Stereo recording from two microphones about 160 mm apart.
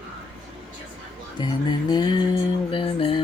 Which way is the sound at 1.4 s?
25° left (ahead or behind).